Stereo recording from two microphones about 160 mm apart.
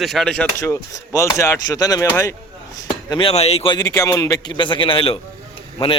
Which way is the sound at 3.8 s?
20° left (ahead or behind).